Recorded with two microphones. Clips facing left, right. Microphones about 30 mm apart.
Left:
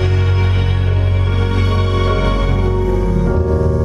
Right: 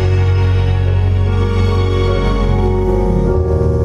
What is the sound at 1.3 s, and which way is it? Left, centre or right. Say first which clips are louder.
Music: right 2 dB; left.